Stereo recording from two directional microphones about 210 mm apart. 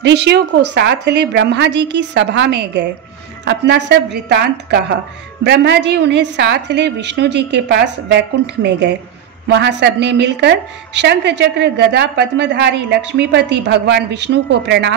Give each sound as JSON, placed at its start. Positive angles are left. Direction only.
{"t": 0.0, "sound": "a woman's voice", "side_deg": -55}